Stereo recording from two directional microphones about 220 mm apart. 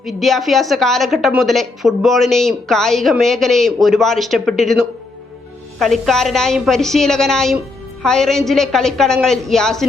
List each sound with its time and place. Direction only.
0.0 s a woman's voice: centre (ahead or behind)